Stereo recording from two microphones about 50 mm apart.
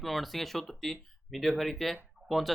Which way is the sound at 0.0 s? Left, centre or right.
Centre.